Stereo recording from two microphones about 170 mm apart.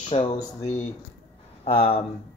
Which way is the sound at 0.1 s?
35° left (ahead or behind).